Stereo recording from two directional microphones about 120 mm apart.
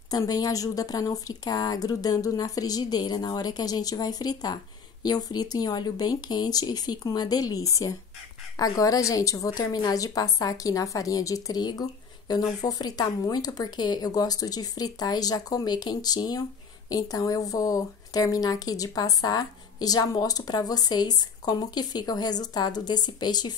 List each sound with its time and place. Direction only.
0.1 s a woman's voice: 30° left (ahead or behind)